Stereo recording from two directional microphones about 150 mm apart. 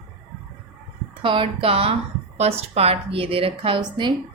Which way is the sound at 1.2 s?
35° right (ahead or behind).